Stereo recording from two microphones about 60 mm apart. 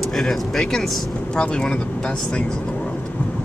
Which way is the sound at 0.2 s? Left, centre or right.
Centre.